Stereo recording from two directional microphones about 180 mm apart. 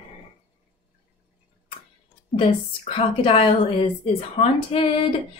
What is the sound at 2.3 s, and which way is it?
Speech, 30° left (ahead or behind).